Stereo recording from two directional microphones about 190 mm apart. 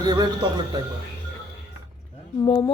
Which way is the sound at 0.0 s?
20° right (ahead or behind).